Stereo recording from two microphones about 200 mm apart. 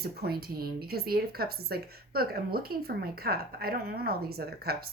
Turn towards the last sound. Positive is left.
turn(degrees=-50)  # may be behind; listen again after turning